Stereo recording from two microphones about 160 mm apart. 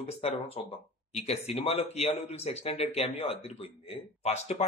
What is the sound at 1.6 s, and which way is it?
Speech, 40° left (ahead or behind).